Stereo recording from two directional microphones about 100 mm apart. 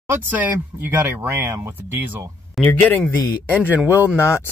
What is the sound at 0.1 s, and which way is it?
Speech, 20° right (ahead or behind).